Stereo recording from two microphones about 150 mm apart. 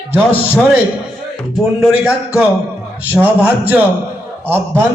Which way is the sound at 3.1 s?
10° right (ahead or behind).